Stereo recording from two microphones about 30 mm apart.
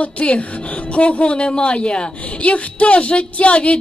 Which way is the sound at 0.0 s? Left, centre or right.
Left.